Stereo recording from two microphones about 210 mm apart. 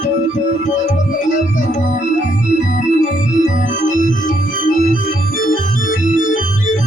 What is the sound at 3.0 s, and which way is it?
Organ, 40° left (ahead or behind).